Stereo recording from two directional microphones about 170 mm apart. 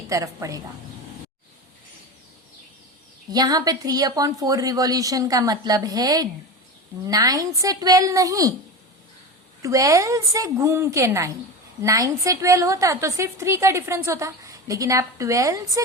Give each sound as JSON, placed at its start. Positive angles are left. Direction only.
{"t": 0.1, "sound": "speech", "side_deg": -20}
{"t": 3.3, "sound": "speech", "side_deg": -20}
{"t": 9.6, "sound": "a woman's voice", "side_deg": -20}